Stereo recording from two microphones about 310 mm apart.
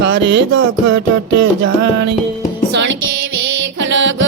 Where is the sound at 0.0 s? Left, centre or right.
Right.